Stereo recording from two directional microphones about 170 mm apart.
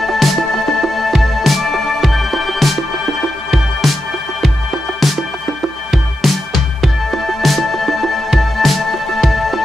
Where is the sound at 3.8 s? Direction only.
Centre (ahead or behind).